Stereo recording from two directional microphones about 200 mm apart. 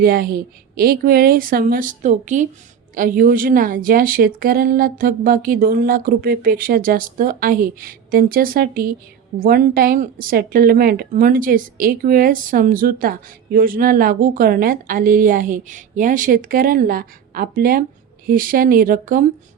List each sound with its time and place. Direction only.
0.0 s speech: 45° right (ahead or behind)